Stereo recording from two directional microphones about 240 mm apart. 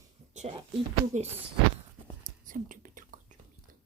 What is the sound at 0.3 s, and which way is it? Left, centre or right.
Speech, right.